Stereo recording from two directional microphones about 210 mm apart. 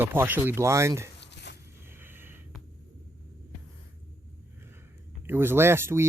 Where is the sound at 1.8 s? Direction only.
10° right (ahead or behind).